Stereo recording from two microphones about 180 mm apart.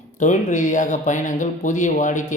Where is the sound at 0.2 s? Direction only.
40° left (ahead or behind).